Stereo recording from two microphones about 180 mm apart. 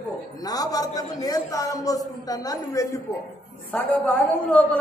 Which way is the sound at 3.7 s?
5° left (ahead or behind).